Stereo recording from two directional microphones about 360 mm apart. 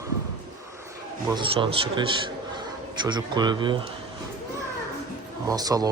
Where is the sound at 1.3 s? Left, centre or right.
Centre.